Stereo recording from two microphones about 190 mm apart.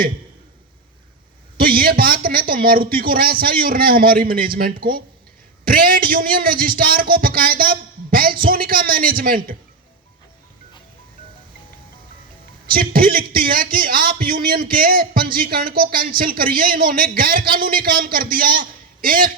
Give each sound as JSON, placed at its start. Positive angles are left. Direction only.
{"t": 1.5, "sound": "a man's voice", "side_deg": -50}
{"t": 12.7, "sound": "a man's voice", "side_deg": -50}